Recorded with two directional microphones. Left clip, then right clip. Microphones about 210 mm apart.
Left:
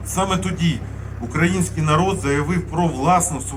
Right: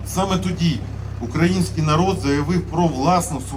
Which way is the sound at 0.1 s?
20° left (ahead or behind).